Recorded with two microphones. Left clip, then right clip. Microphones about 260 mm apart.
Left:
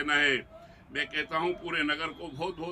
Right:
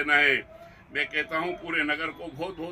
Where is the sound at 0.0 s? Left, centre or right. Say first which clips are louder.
Right 4 dB; centre.